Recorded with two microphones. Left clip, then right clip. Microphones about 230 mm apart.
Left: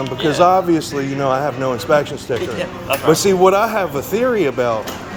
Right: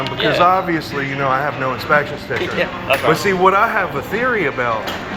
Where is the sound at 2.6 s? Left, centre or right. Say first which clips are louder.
Right 4 dB; left.